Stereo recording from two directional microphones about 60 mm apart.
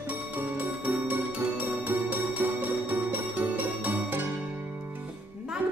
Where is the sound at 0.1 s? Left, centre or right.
Right.